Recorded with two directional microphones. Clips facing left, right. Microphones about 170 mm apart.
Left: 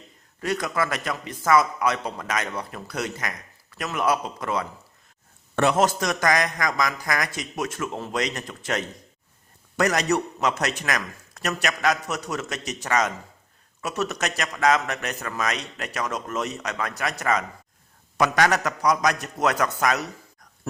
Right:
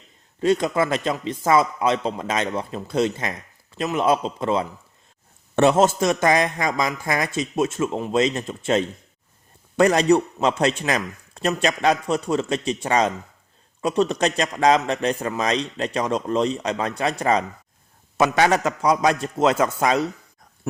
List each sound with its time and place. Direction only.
0.4 s a man's voice: 25° right (ahead or behind)